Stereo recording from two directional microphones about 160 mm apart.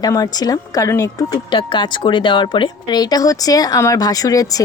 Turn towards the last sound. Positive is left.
turn(degrees=20)  # may be behind; listen again after turning